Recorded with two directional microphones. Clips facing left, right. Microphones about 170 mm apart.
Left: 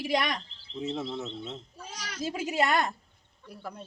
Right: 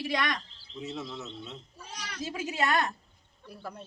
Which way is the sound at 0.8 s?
30° left (ahead or behind).